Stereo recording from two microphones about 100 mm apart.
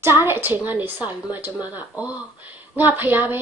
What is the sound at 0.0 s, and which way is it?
A woman's voice, 25° right (ahead or behind).